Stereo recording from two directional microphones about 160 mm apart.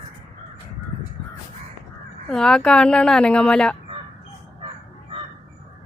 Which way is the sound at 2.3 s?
5° left (ahead or behind).